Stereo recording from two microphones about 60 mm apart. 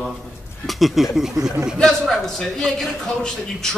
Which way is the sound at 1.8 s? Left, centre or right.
Centre.